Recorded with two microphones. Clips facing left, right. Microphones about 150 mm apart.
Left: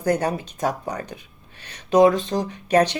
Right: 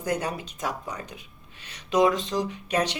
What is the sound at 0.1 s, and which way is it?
Speech, 35° left (ahead or behind).